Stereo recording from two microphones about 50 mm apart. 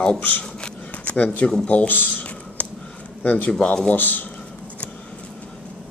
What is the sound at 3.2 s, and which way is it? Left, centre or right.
Speech, left.